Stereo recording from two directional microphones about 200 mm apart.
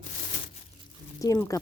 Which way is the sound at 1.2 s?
15° left (ahead or behind).